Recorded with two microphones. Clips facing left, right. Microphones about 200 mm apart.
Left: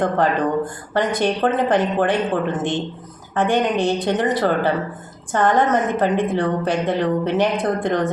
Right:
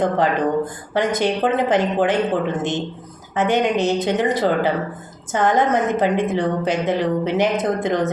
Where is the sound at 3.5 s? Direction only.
20° right (ahead or behind).